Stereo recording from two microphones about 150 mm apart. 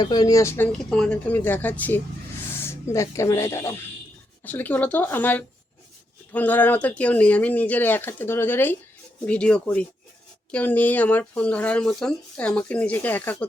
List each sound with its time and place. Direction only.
0.0 s speech: 25° left (ahead or behind)
0.7 s speech: 5° left (ahead or behind)